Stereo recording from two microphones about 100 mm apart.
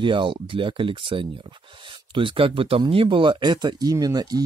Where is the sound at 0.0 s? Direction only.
55° right (ahead or behind).